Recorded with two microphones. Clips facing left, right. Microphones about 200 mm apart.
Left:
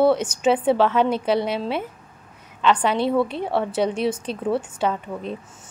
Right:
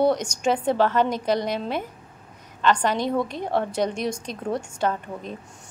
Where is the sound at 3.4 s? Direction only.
5° left (ahead or behind).